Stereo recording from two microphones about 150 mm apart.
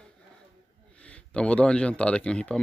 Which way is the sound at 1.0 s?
10° left (ahead or behind).